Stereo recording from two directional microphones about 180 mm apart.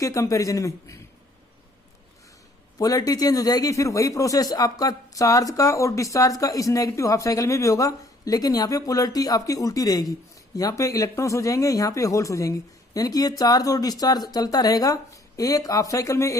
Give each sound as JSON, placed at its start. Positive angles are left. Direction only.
{"t": 0.0, "sound": "a woman's voice", "side_deg": 15}
{"t": 2.7, "sound": "speech", "side_deg": 20}